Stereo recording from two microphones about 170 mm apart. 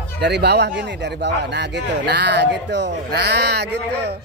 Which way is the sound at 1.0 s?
90° right.